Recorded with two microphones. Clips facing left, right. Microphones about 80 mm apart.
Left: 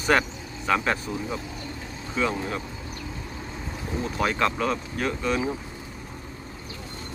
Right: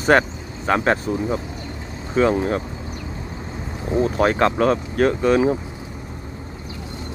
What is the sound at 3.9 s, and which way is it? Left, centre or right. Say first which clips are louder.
Speech: right 9 dB; right.